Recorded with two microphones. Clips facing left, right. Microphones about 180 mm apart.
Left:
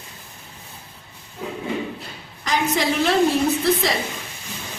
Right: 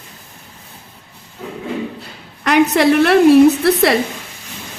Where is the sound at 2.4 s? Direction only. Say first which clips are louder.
Right 9 dB; 65° right (ahead or behind).